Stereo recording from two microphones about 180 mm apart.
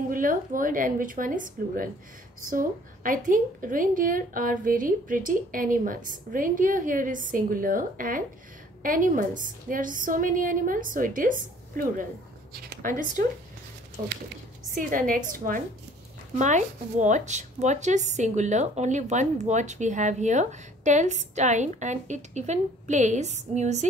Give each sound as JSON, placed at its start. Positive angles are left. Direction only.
{"t": 0.1, "sound": "a woman's voice", "side_deg": -50}